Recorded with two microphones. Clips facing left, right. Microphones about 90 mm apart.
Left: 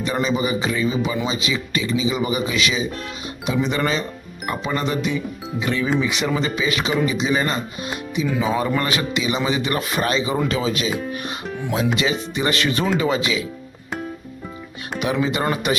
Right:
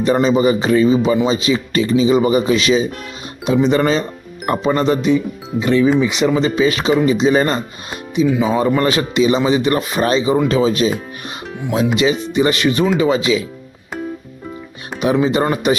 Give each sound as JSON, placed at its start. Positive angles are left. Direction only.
{"t": 0.0, "sound": "a man's voice", "side_deg": -35}
{"t": 5.6, "sound": "a man's voice", "side_deg": -25}
{"t": 11.9, "sound": "speech", "side_deg": -20}
{"t": 14.9, "sound": "speech", "side_deg": -30}